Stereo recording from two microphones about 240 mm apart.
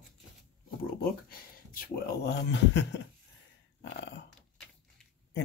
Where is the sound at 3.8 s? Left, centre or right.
Left.